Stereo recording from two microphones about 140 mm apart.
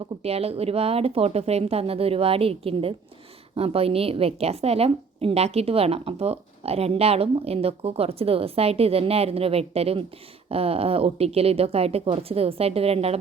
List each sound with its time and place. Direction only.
0.0 s a woman's voice: 45° right (ahead or behind)